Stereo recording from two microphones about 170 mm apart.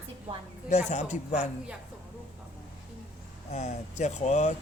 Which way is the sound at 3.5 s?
40° left (ahead or behind).